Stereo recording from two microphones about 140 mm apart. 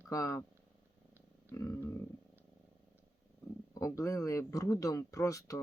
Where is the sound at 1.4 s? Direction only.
20° left (ahead or behind).